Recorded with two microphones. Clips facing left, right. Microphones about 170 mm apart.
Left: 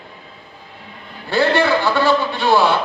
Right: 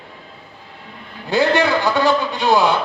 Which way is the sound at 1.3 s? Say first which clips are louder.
Even; 15° right (ahead or behind).